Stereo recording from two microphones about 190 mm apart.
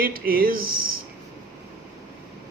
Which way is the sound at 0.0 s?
50° right (ahead or behind).